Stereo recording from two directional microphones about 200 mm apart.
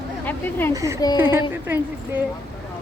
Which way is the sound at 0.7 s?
15° right (ahead or behind).